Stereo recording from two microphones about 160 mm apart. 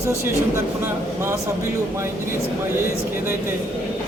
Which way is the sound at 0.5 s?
15° right (ahead or behind).